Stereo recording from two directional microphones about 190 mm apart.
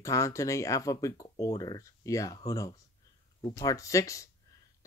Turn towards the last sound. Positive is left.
turn(degrees=15)  # may be behind; listen again after turning